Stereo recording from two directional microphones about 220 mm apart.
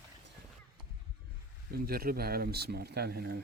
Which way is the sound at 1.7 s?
45° right (ahead or behind).